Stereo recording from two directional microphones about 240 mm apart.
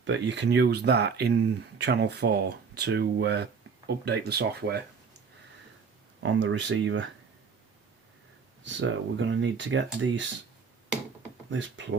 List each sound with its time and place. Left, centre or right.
0.0 s speech: right
6.1 s speech: right
8.6 s speech: right
11.5 s speech: right